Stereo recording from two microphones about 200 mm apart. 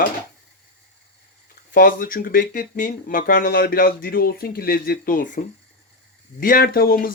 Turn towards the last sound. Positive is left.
turn(degrees=45)  # may be behind; listen again after turning